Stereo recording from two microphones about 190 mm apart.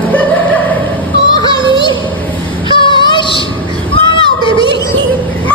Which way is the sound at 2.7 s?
25° left (ahead or behind).